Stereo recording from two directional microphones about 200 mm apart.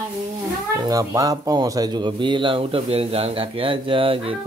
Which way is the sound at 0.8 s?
15° right (ahead or behind).